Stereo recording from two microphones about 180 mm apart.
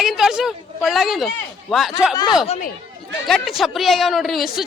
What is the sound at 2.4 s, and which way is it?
Speech, 35° left (ahead or behind).